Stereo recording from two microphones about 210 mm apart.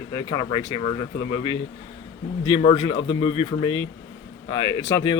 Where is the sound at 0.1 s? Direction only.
15° left (ahead or behind).